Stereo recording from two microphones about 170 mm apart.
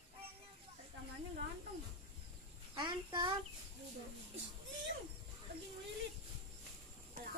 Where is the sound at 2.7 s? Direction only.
30° right (ahead or behind).